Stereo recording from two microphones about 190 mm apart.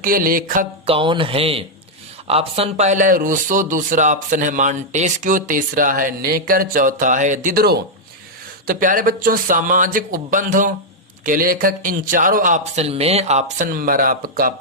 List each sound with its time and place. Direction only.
0.0 s a man's voice: 50° right (ahead or behind)
0.9 s a man's voice: 25° right (ahead or behind); by 14.5 s 50° right (ahead or behind)